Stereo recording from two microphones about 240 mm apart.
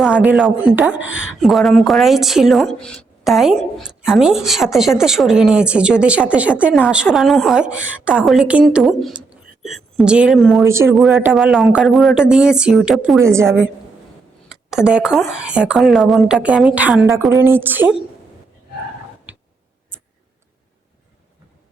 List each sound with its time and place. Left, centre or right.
0.0 s a woman's voice: centre
0.9 s speech: left
1.4 s a woman's voice: centre
10.7 s speech: centre
10.9 s a woman's voice: centre
19.3 s tick: centre